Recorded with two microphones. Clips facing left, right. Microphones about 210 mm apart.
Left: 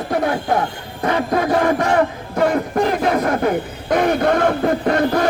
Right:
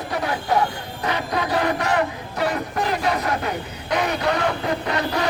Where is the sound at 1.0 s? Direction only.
50° left (ahead or behind).